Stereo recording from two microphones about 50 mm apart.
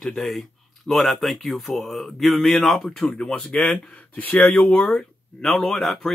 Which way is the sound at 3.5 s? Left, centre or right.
Left.